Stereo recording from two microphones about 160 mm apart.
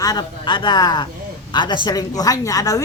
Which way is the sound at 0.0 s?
25° left (ahead or behind).